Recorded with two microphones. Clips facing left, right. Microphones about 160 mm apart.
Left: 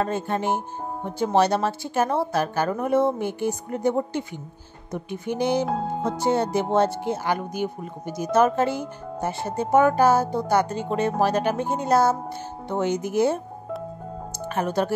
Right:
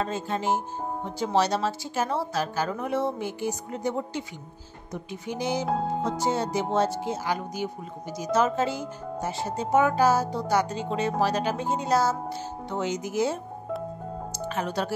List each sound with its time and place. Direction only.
0.0 s speech: 55° left (ahead or behind)
5.7 s speech: centre (ahead or behind)
6.0 s speech: 60° left (ahead or behind)
14.5 s speech: 50° left (ahead or behind)